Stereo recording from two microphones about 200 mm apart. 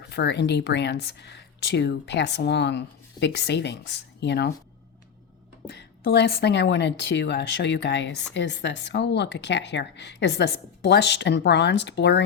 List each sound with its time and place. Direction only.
0.1 s a woman's voice: 60° left (ahead or behind)
5.7 s a woman's voice: 55° left (ahead or behind)